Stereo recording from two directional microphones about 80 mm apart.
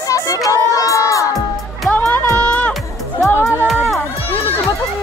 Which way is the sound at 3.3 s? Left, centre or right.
Left.